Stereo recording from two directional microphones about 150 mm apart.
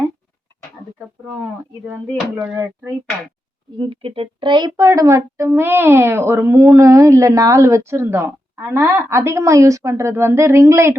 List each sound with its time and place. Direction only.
3.8 s speech: 35° right (ahead or behind); by 10.9 s 20° right (ahead or behind)